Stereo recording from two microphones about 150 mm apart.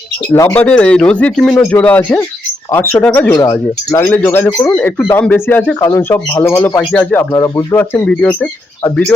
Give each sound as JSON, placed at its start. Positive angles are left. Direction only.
{"t": 0.3, "sound": "speech", "side_deg": 10}
{"t": 3.3, "sound": "speech", "side_deg": 25}
{"t": 7.3, "sound": "speech", "side_deg": 20}